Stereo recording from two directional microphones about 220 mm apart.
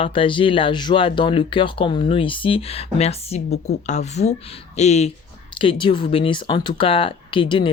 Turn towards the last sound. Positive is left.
turn(degrees=20)  # may be behind; listen again after turning